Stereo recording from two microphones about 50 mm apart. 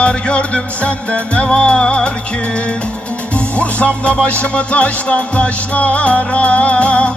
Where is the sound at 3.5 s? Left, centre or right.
Left.